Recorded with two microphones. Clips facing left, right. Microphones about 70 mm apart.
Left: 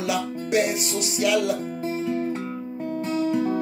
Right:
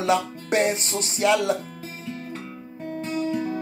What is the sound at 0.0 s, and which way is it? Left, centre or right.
Music, right.